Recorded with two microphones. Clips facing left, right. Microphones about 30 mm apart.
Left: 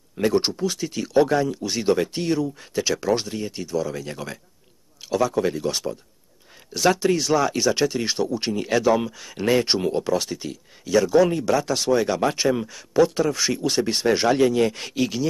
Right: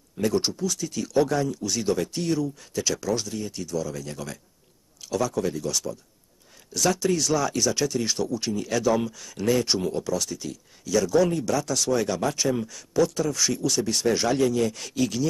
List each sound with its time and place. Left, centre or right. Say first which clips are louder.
0.2 s speech: left 4 dB; left